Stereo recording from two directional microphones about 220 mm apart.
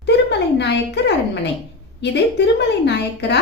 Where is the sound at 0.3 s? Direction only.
50° left (ahead or behind).